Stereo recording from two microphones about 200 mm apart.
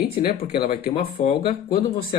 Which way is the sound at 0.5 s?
45° left (ahead or behind).